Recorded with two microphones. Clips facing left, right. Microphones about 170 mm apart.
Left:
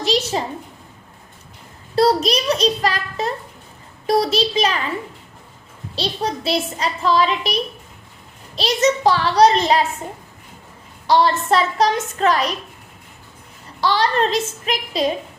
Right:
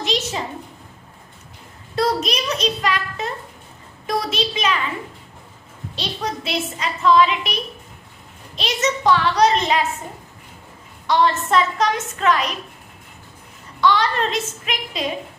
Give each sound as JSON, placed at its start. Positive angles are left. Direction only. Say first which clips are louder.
{"t": 0.0, "sound": "a sound", "louder": "left 4 dB", "side_deg": 35}
{"t": 2.0, "sound": "a child's voice", "louder": "left 5 dB", "side_deg": 35}
{"t": 4.0, "sound": "a sound", "louder": "left 6 dB", "side_deg": 35}
{"t": 6.0, "sound": "speech", "louder": "left 4 dB", "side_deg": 35}
{"t": 8.5, "sound": "speech", "louder": "left 5 dB", "side_deg": 35}
{"t": 11.0, "sound": "speech", "louder": "left 2 dB", "side_deg": 35}
{"t": 13.8, "sound": "speech", "louder": "left 1 dB", "side_deg": 35}